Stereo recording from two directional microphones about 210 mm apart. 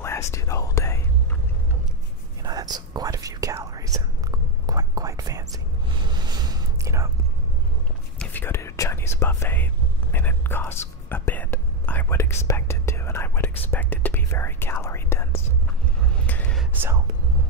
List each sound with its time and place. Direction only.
0.0 s whispering: 15° left (ahead or behind)
2.4 s whispering: 20° right (ahead or behind)
8.2 s whispering: 10° left (ahead or behind)
16.3 s a sound: 5° left (ahead or behind)